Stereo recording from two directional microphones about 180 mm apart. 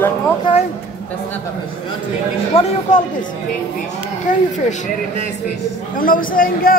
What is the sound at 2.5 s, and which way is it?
Speech, 30° left (ahead or behind).